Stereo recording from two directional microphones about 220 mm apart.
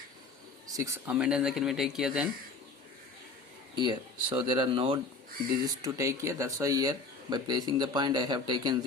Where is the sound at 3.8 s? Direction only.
20° right (ahead or behind).